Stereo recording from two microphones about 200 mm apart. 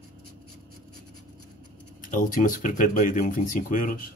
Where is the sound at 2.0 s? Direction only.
40° left (ahead or behind).